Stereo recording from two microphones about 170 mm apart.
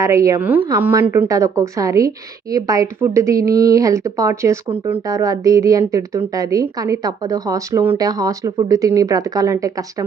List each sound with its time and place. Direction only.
0.0 s a woman's voice: 20° right (ahead or behind)